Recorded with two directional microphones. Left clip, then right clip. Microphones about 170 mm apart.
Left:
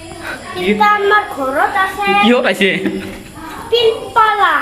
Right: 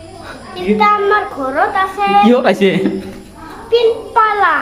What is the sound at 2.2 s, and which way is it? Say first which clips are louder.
Speech: right 2 dB; 15° right (ahead or behind).